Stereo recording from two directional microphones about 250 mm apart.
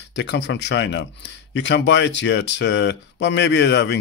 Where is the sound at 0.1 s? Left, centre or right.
Left.